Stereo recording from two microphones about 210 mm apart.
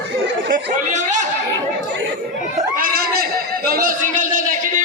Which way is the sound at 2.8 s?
45° right (ahead or behind).